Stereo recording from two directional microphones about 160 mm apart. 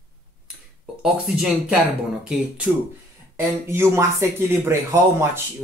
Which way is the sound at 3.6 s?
15° right (ahead or behind).